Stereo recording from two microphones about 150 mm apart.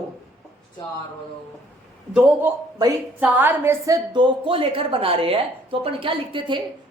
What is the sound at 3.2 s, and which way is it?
A woman's voice, 10° right (ahead or behind).